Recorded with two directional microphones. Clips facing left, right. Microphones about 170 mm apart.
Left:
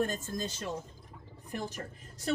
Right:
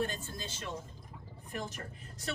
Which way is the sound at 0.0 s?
45° left (ahead or behind).